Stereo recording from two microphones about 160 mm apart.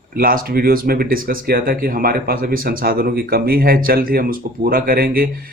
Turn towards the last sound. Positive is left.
turn(degrees=-65)  # may be behind; listen again after turning